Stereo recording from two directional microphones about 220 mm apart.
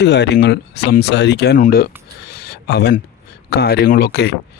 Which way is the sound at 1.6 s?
40° left (ahead or behind).